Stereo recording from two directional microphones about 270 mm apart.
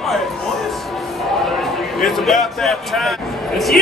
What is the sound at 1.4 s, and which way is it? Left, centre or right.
Speech, centre.